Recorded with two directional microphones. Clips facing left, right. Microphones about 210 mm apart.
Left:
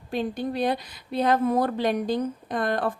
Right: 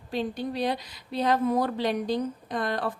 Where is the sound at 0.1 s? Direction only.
50° left (ahead or behind).